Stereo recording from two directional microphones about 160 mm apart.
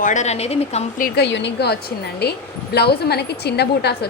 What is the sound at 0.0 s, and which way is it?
Speech, 50° left (ahead or behind).